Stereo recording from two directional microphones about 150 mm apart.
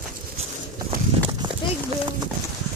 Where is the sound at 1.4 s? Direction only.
30° right (ahead or behind).